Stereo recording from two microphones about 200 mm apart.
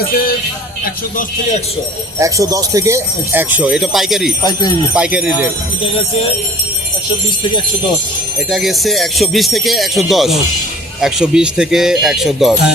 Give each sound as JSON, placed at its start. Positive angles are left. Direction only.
{"t": 2.1, "sound": "speech", "side_deg": -15}
{"t": 8.4, "sound": "speech", "side_deg": 0}